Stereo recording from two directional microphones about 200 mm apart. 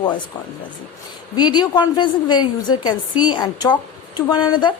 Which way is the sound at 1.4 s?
20° left (ahead or behind).